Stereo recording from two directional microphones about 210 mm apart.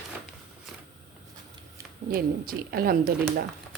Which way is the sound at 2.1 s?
45° right (ahead or behind).